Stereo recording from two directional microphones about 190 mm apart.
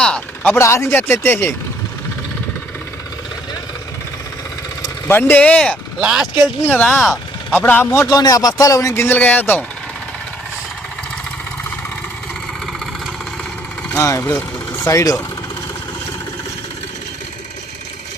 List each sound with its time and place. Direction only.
0.0 s a man's voice: 5° left (ahead or behind)
4.8 s speech: 10° left (ahead or behind); by 6.2 s 5° right (ahead or behind)
6.6 s speech: 10° left (ahead or behind)
7.6 s a man's voice: 10° left (ahead or behind)
13.9 s a man's voice: 15° left (ahead or behind)